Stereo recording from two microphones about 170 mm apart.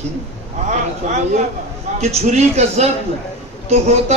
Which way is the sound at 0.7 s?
45° right (ahead or behind).